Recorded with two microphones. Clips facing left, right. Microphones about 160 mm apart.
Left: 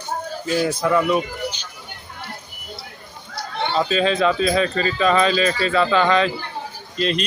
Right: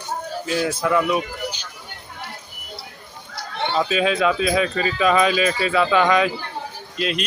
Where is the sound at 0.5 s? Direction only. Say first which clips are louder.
Left 2 dB; 5° right (ahead or behind).